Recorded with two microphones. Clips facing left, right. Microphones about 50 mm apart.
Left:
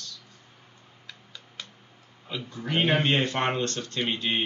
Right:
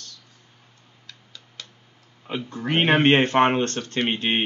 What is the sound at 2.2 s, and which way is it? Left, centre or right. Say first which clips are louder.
Speech: right 6 dB; right.